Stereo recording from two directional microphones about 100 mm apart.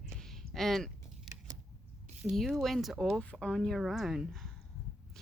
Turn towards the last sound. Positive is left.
turn(degrees=0)  # may be behind; listen again after turning